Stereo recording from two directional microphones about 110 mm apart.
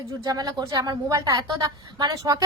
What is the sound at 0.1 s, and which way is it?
A woman's voice, 35° right (ahead or behind).